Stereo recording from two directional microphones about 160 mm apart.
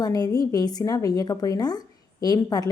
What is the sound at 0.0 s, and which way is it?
A woman's voice, 25° left (ahead or behind).